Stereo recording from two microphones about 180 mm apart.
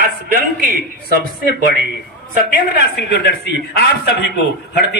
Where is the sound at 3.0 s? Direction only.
65° left (ahead or behind).